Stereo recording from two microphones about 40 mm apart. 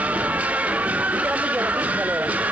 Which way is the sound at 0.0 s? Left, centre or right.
Right.